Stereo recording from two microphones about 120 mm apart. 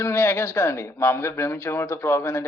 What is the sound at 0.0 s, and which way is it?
A man's voice, 20° left (ahead or behind).